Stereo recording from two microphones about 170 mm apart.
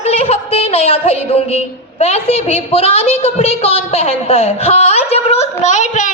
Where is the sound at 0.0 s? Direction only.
35° left (ahead or behind).